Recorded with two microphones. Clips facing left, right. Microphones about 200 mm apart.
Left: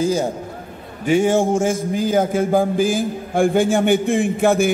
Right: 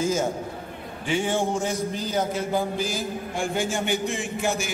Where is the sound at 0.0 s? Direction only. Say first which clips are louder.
Left 5 dB; 35° left (ahead or behind).